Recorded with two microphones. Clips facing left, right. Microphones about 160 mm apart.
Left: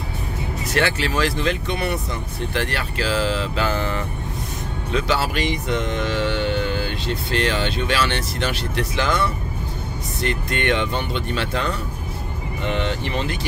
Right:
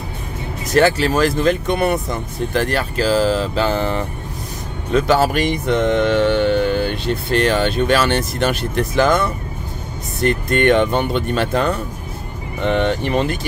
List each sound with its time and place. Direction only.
0.7 s speech: 40° right (ahead or behind)
4.9 s speech: 50° right (ahead or behind)